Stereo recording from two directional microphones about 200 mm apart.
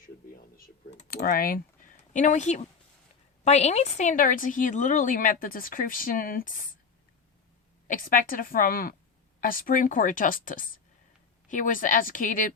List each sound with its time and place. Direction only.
0.5 s a woman's voice: 35° left (ahead or behind)
1.1 s a woman's voice: 45° left (ahead or behind)
7.9 s a woman's voice: 45° left (ahead or behind)